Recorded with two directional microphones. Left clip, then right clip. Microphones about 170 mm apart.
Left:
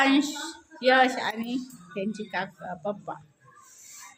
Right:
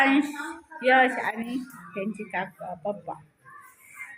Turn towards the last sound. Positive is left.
turn(degrees=15)  # may be behind; listen again after turning